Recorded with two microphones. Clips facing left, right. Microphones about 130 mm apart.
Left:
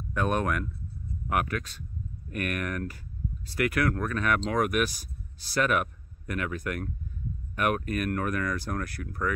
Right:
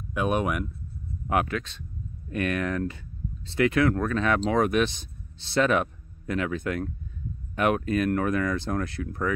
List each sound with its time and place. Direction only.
0.1 s speech: 10° right (ahead or behind)
1.2 s speech: 25° right (ahead or behind)